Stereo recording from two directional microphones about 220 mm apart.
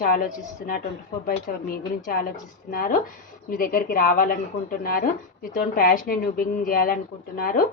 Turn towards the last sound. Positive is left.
turn(degrees=40)  # may be behind; listen again after turning